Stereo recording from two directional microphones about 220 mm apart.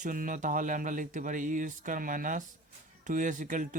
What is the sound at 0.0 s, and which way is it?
Speech, 35° right (ahead or behind).